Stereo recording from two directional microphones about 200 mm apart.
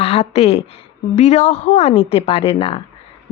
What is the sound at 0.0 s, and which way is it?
A woman's voice, 30° left (ahead or behind).